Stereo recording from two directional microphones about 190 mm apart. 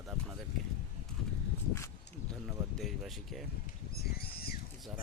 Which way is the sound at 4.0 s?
55° left (ahead or behind).